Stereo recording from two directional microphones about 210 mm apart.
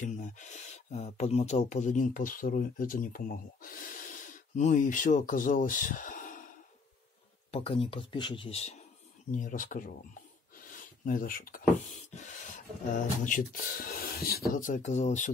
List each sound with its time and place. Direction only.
0.2 s speech: 35° left (ahead or behind)
7.5 s speech: 25° left (ahead or behind)
9.3 s speech: 40° left (ahead or behind)
14.6 s speech: 35° left (ahead or behind)